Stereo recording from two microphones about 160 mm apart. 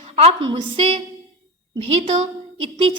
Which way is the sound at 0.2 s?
35° right (ahead or behind).